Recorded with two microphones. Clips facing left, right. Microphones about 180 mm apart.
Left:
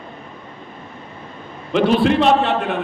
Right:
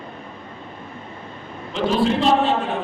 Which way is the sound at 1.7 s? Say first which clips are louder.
Left 5 dB; 65° left (ahead or behind).